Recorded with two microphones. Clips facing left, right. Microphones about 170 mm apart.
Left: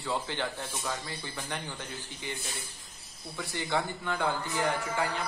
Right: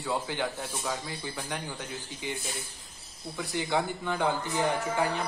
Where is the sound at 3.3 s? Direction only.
15° right (ahead or behind).